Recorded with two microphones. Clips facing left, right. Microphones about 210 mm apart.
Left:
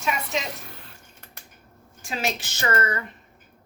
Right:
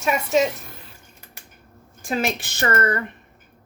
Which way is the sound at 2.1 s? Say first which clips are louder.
Right 5 dB; 55° right (ahead or behind).